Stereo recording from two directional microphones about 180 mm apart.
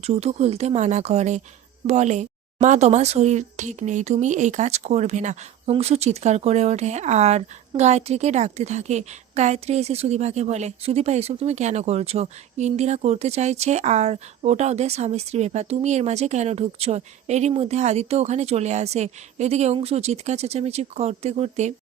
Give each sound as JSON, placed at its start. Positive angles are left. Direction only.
{"t": 0.0, "sound": "a woman's voice", "side_deg": -35}